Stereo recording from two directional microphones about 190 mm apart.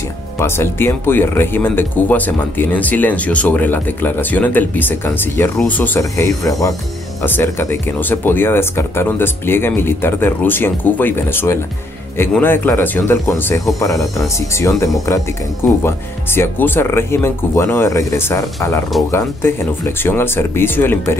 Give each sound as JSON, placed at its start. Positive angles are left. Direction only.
{"t": 0.4, "sound": "speech", "side_deg": 10}